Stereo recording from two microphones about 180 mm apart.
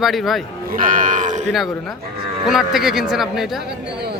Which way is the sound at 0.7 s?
50° right (ahead or behind).